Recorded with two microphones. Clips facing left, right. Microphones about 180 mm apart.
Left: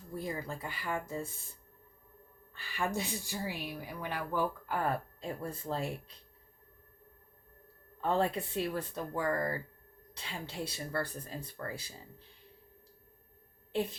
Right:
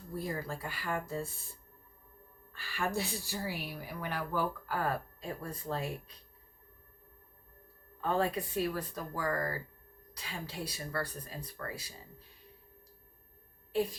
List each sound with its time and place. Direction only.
0.1 s a woman's voice: 20° left (ahead or behind)
2.5 s a woman's voice: 20° left (ahead or behind)
8.0 s a woman's voice: 25° left (ahead or behind)